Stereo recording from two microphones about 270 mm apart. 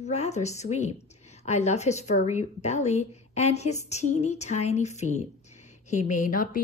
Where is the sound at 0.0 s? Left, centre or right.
Left.